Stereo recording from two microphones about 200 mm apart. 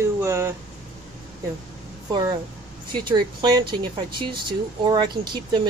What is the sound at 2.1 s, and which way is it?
Speech, 20° right (ahead or behind).